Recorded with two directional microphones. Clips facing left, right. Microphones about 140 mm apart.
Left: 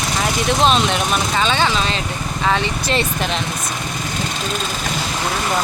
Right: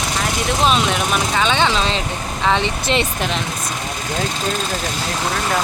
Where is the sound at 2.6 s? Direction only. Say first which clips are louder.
Right 1 dB; 20° right (ahead or behind).